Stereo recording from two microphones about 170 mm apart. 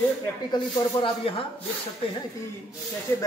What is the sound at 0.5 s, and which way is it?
Speech, 30° left (ahead or behind).